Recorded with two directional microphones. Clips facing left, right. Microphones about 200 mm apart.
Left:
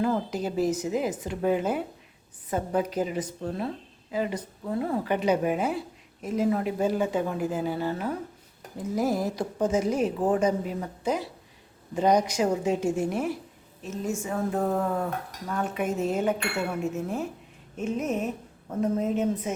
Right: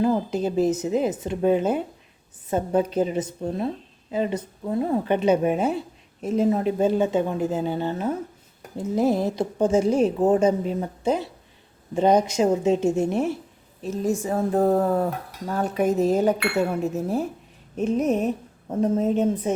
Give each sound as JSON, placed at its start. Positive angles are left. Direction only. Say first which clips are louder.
{"t": 0.0, "sound": "a woman's voice", "louder": "right 5 dB", "side_deg": -20}
{"t": 13.8, "sound": "speech", "louder": "right 6 dB", "side_deg": -35}